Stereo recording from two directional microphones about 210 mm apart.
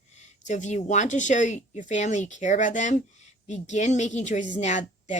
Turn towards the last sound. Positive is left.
turn(degrees=35)  # may be behind; listen again after turning